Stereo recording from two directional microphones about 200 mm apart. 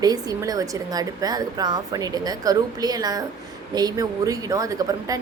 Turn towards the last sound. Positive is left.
turn(degrees=-20)  # may be behind; listen again after turning